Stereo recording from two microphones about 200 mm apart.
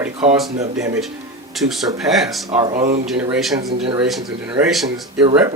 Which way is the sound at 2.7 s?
40° right (ahead or behind).